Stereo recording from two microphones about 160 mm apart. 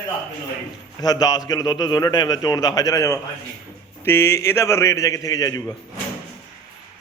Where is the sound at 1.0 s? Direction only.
25° left (ahead or behind).